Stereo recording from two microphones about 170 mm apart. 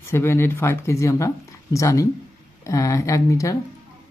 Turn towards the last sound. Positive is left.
turn(degrees=20)  # may be behind; listen again after turning